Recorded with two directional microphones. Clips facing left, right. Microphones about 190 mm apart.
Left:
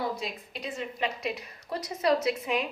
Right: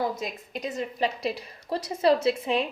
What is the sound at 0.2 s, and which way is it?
A woman's voice, 45° right (ahead or behind).